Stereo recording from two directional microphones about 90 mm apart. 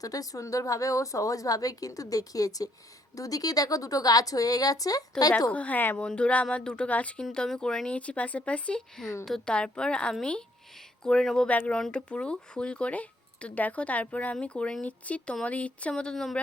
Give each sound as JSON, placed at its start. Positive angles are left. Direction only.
{"t": 0.0, "sound": "a woman's voice", "side_deg": 40}
{"t": 5.5, "sound": "speech", "side_deg": 15}